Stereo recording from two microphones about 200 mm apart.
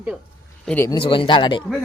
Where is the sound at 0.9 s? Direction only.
25° left (ahead or behind).